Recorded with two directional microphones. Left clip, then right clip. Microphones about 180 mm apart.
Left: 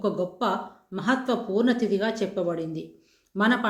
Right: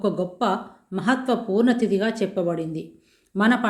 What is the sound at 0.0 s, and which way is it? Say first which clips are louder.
Speech: right 3 dB; 40° right (ahead or behind).